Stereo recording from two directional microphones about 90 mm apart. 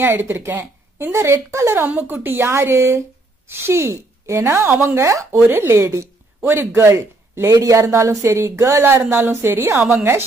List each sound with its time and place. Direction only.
0.0 s a woman's voice: 25° right (ahead or behind)
1.9 s speech: 20° right (ahead or behind)